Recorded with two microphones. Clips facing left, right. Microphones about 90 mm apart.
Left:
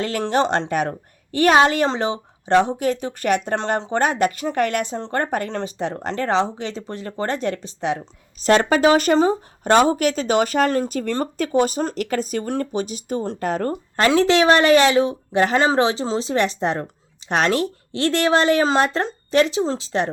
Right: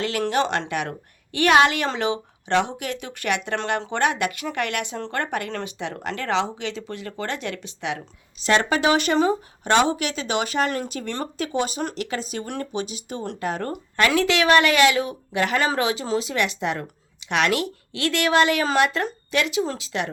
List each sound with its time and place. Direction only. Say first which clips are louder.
0.0 s a woman's voice: left 3 dB; 40° left (ahead or behind)